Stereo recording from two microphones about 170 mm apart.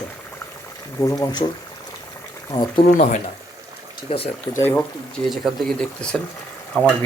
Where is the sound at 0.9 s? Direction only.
20° left (ahead or behind).